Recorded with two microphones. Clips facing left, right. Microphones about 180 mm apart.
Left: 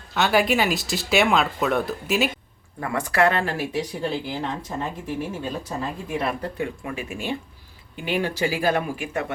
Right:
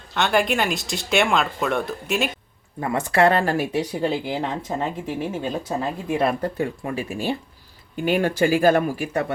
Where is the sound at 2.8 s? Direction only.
25° right (ahead or behind).